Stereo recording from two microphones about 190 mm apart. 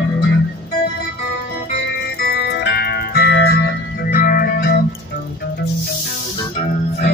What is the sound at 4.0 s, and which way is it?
Music, 45° left (ahead or behind).